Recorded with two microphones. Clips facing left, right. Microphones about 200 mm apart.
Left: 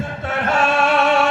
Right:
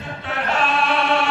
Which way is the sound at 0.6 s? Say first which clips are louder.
Left 5 dB; 45° left (ahead or behind).